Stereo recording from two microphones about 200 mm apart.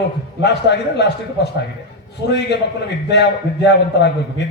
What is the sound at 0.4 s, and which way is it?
A man's voice, 60° left (ahead or behind).